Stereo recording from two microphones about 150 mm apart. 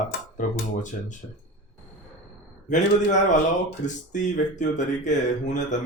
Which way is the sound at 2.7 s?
55° left (ahead or behind).